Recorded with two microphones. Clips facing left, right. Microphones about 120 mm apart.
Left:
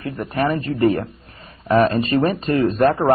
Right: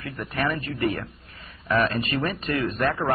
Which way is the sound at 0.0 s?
30° left (ahead or behind).